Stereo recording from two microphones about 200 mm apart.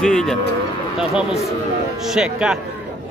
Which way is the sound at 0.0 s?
5° left (ahead or behind).